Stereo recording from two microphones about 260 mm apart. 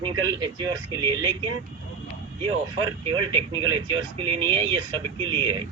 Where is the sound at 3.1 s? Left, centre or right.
Centre.